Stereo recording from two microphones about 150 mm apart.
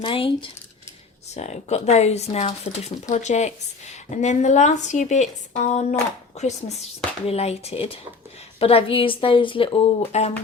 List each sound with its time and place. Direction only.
0.0 s a woman's voice: 35° left (ahead or behind)
1.3 s a woman's voice: 50° left (ahead or behind)